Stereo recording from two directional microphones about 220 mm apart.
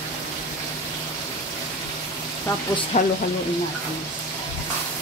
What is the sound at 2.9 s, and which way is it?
Speech, 35° left (ahead or behind).